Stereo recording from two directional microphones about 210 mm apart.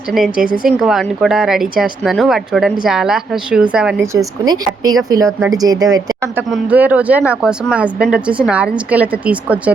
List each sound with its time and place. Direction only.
0.1 s a woman's voice: centre (ahead or behind)